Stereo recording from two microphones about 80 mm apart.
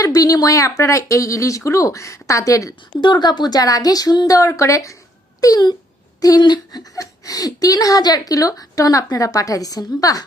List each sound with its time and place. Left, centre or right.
0.0 s speech: left
3.0 s speech: left
4.4 s speech: left
5.4 s speech: left
6.9 s a woman's voice: left